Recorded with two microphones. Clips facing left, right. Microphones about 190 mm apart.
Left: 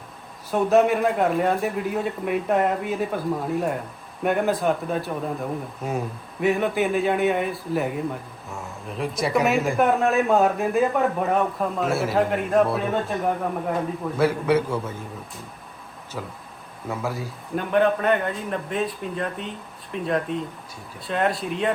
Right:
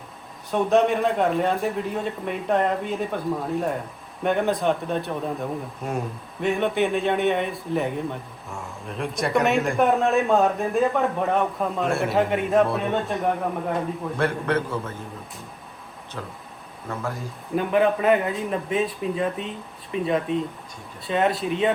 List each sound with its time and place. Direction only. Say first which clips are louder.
0.5 s a man's voice: left 1 dB; 5° left (ahead or behind)
16.9 s speech: left 2 dB; 10° left (ahead or behind)